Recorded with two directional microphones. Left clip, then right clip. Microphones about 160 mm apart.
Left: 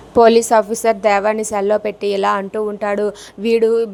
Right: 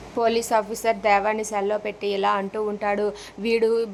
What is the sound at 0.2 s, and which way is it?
Speech, 45° left (ahead or behind).